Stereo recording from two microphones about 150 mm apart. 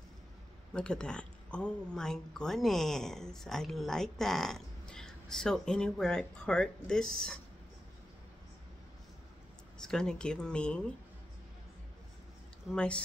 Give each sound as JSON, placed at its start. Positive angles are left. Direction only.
{"t": 0.7, "sound": "speech", "side_deg": 5}
{"t": 9.8, "sound": "speech", "side_deg": 5}
{"t": 12.7, "sound": "speech", "side_deg": 5}